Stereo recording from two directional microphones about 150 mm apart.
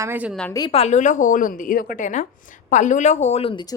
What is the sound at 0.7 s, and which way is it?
A woman's voice, 45° left (ahead or behind).